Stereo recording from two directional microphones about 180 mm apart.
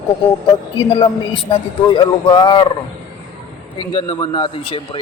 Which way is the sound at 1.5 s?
25° left (ahead or behind).